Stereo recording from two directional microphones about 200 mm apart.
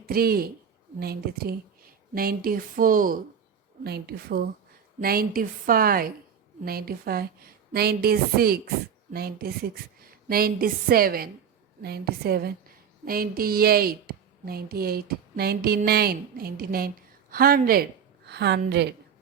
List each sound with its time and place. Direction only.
0.0 s a woman's voice: 50° right (ahead or behind)
18.3 s a woman's voice: 55° right (ahead or behind)